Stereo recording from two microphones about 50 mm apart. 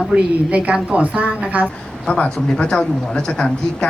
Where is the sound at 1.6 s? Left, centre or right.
Centre.